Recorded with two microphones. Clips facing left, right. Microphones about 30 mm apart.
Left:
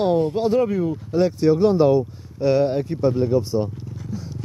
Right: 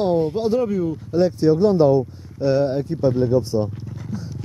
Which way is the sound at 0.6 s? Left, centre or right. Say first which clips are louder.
Left 1 dB; centre.